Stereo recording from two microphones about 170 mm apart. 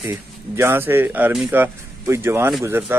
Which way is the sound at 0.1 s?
15° right (ahead or behind).